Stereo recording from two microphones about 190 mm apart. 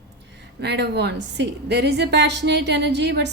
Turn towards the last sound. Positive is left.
turn(degrees=-65)  # may be behind; listen again after turning